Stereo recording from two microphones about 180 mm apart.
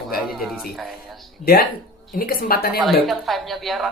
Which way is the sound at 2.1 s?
55° left (ahead or behind).